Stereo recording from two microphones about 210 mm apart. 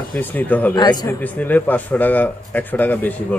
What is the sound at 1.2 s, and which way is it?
A woman's voice, 10° left (ahead or behind).